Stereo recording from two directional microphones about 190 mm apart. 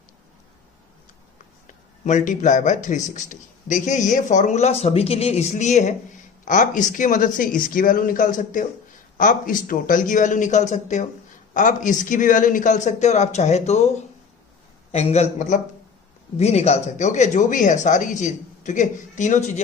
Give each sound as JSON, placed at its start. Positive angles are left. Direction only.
{"t": 1.6, "sound": "a man's voice", "side_deg": 40}
{"t": 14.9, "sound": "a man's voice", "side_deg": 35}